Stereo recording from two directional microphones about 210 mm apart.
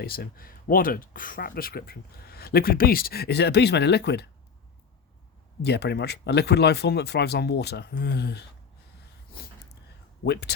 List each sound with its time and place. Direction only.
0.0 s speech: 45° left (ahead or behind)
5.6 s speech: 50° left (ahead or behind)
10.2 s speech: 50° left (ahead or behind)